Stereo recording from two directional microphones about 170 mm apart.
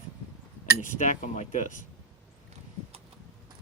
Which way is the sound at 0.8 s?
50° left (ahead or behind).